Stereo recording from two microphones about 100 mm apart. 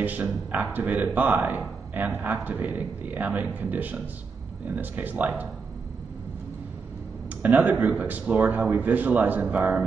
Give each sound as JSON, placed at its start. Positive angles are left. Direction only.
{"t": 0.0, "sound": "a man's voice", "side_deg": -15}
{"t": 7.4, "sound": "speech", "side_deg": -15}